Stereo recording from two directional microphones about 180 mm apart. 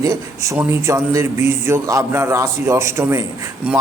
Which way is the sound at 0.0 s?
15° right (ahead or behind).